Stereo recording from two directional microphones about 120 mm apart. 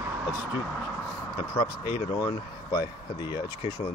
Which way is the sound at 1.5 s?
40° left (ahead or behind).